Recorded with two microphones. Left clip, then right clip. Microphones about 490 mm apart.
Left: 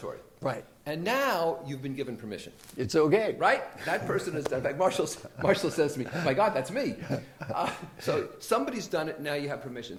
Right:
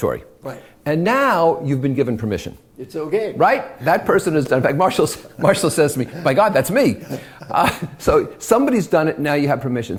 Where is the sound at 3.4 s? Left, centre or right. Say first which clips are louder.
Right 10 dB; right.